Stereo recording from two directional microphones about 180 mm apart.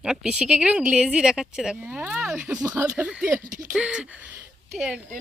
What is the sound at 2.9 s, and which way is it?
Speech, 5° right (ahead or behind).